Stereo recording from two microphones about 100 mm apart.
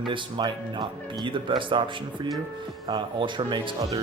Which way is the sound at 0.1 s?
55° right (ahead or behind).